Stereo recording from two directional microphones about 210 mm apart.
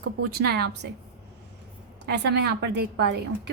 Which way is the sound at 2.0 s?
55° right (ahead or behind).